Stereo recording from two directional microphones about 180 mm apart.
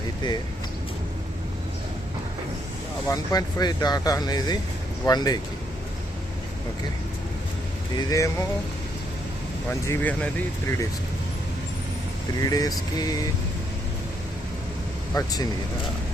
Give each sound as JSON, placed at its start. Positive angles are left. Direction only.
{"t": 3.1, "sound": "speech", "side_deg": 20}
{"t": 7.9, "sound": "speech", "side_deg": 15}
{"t": 9.8, "sound": "speech", "side_deg": 10}
{"t": 12.4, "sound": "speech", "side_deg": 20}
{"t": 15.1, "sound": "speech", "side_deg": 20}